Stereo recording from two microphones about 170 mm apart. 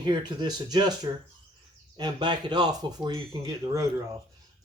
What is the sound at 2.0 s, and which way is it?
Speech, 25° right (ahead or behind).